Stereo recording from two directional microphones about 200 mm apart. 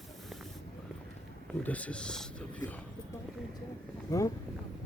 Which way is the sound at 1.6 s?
5° left (ahead or behind).